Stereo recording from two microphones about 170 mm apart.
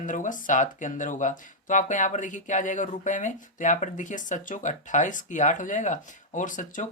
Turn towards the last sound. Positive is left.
turn(degrees=50)  # may be behind; listen again after turning